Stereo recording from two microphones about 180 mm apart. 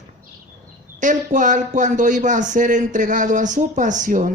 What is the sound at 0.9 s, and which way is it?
Speech, 45° right (ahead or behind).